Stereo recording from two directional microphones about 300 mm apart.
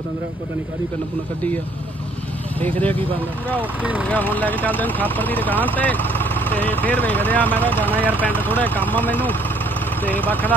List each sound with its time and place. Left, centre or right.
2.6 s speech: centre
3.8 s speech: centre
4.1 s speech: centre
7.8 s speech: centre
8.2 s speech: centre